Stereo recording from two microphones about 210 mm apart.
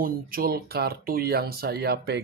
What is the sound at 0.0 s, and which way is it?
Speech, 45° right (ahead or behind).